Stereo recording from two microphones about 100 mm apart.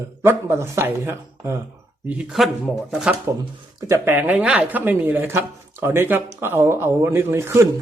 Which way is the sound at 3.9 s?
20° right (ahead or behind).